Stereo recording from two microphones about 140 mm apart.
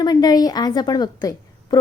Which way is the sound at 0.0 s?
30° left (ahead or behind).